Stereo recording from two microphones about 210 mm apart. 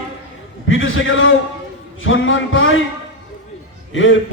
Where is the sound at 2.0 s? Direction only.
65° left (ahead or behind).